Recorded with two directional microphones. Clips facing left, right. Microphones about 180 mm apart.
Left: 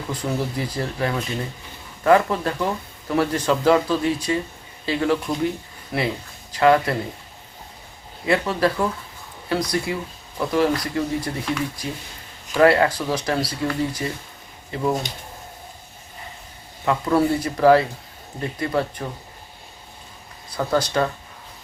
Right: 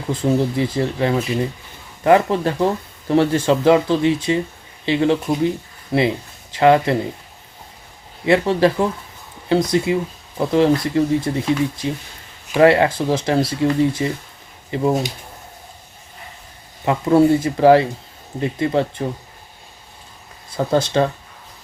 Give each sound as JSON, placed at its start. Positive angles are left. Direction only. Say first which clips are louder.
{"t": 0.1, "sound": "speech", "louder": "right 8 dB", "side_deg": -25}
{"t": 8.3, "sound": "speech", "louder": "right 5 dB", "side_deg": -25}
{"t": 16.8, "sound": "speech", "louder": "right 5 dB", "side_deg": -25}
{"t": 20.6, "sound": "speech", "louder": "right 4 dB", "side_deg": -25}